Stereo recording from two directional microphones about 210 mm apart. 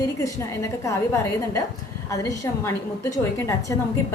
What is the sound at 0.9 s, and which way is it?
Speech, 15° left (ahead or behind).